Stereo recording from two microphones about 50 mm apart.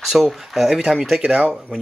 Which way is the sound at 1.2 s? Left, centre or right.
Right.